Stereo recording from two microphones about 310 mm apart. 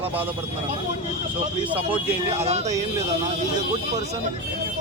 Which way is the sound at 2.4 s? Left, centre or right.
Centre.